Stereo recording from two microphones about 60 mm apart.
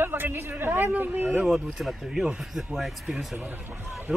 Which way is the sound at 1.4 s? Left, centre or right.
Centre.